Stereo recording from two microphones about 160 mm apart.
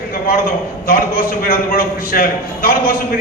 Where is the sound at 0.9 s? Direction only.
65° left (ahead or behind).